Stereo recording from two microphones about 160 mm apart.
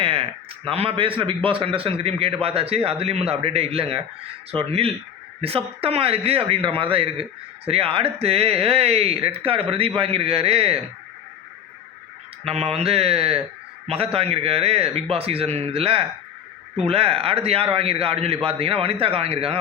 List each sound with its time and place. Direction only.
0.0 s a sound: 35° right (ahead or behind)
0.7 s a man's voice: 35° right (ahead or behind)
12.5 s a man's voice: 40° right (ahead or behind)